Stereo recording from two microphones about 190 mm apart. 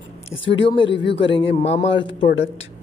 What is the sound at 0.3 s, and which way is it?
Speech, 75° left (ahead or behind).